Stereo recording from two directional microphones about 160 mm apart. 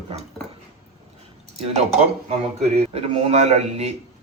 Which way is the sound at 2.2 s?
40° right (ahead or behind).